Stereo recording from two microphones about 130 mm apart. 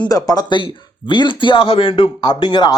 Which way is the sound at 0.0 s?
30° left (ahead or behind).